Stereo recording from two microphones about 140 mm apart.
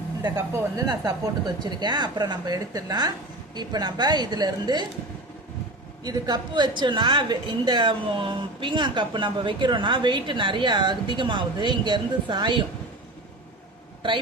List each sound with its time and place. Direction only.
0.2 s a woman's voice: 25° right (ahead or behind)
6.0 s a woman's voice: 30° right (ahead or behind)